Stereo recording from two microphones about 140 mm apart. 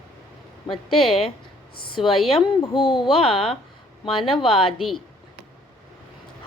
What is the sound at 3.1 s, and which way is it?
Speech, 40° left (ahead or behind).